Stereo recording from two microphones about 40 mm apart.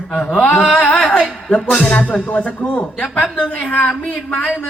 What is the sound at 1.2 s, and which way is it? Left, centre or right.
Speech, centre.